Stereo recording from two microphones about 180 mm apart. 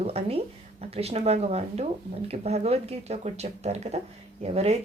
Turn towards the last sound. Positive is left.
turn(degrees=-35)  # may be behind; listen again after turning